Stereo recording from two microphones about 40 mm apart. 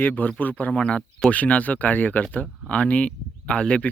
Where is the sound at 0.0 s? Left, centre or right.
Left.